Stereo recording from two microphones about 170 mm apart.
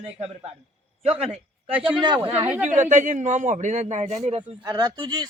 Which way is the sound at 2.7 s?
45° right (ahead or behind).